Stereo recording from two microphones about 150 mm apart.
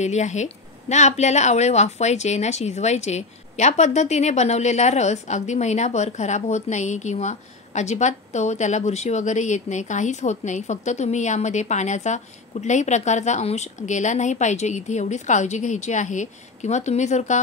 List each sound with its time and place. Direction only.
0.0 s a woman's voice: 50° left (ahead or behind)